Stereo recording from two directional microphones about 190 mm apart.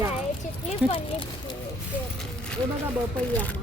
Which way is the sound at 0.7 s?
30° left (ahead or behind).